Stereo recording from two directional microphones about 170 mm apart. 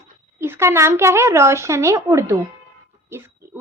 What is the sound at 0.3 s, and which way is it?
A woman's voice, 15° right (ahead or behind).